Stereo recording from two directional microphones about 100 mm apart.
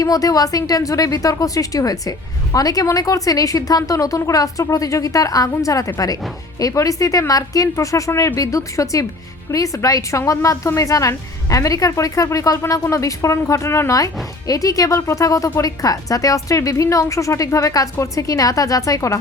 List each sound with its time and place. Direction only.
0.0 s a woman's voice: 35° left (ahead or behind)